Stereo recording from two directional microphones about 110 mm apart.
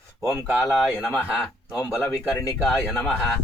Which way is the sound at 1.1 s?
20° left (ahead or behind).